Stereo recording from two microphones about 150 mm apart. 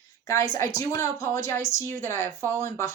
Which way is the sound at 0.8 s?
20° left (ahead or behind).